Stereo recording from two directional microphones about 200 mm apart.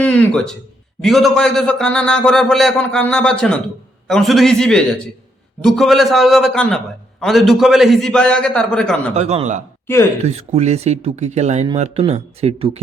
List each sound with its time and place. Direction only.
0.0 s a sound: 5° left (ahead or behind)
1.0 s a man's voice: centre (ahead or behind)
9.1 s speech: 30° right (ahead or behind)
9.8 s speech: 10° left (ahead or behind)
10.2 s speech: 35° right (ahead or behind)